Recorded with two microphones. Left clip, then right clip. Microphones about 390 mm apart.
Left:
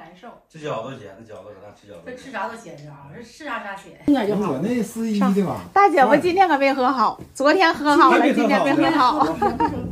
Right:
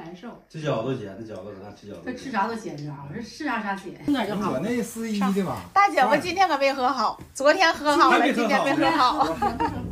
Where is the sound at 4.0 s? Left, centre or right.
Centre.